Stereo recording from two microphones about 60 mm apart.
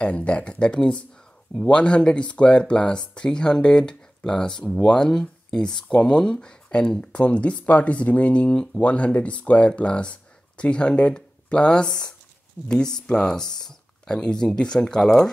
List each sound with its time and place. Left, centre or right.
0.0 s speech: left